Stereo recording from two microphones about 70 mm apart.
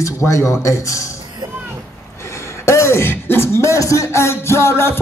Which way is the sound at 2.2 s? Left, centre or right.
Left.